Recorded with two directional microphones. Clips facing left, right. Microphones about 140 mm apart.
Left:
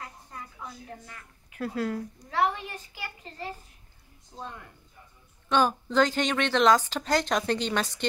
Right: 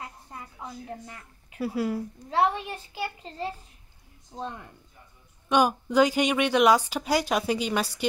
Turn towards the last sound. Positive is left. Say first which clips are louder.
# right 1 dB
turn(degrees=-10)  # may be behind; listen again after turning